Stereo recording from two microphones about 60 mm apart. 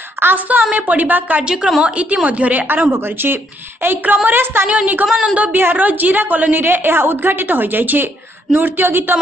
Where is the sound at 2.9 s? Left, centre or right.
Right.